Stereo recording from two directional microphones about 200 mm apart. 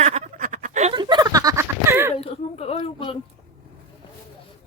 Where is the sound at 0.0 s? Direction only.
35° right (ahead or behind).